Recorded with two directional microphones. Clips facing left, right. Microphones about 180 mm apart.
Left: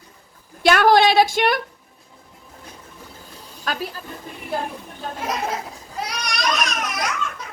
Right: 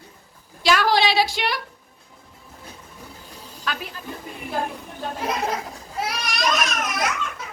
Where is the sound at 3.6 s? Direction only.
45° left (ahead or behind).